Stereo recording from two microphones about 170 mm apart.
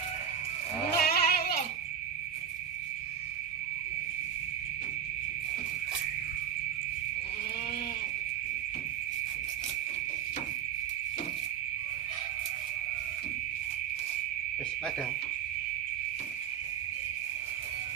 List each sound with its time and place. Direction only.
0.9 s goat: 65° left (ahead or behind)